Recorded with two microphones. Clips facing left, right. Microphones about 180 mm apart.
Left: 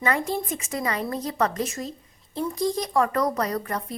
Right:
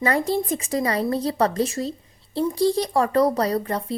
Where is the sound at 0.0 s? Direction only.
35° right (ahead or behind).